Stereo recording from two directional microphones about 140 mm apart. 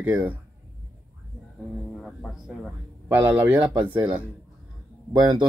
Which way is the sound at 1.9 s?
Centre (ahead or behind).